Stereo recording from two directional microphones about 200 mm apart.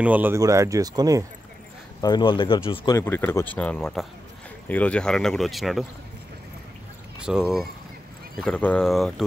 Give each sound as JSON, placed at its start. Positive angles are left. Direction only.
{"t": 0.0, "sound": "speech", "side_deg": -10}
{"t": 2.0, "sound": "speech", "side_deg": 20}
{"t": 3.0, "sound": "speech", "side_deg": 10}
{"t": 7.2, "sound": "speech", "side_deg": -5}